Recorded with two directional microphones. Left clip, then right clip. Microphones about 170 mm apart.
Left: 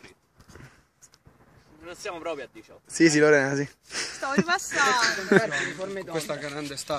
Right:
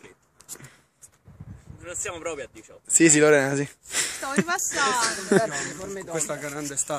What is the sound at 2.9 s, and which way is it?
Speech, 10° right (ahead or behind).